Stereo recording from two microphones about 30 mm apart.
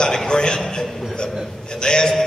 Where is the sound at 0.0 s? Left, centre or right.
Left.